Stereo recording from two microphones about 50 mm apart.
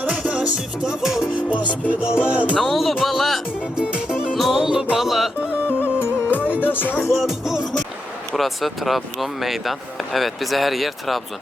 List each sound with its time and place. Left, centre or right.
0.1 s music: centre
1.9 s music: centre
2.6 s speech: centre
3.8 s music: centre
4.9 s speech: centre
5.6 s music: left
6.6 s music: left
7.1 s speech: centre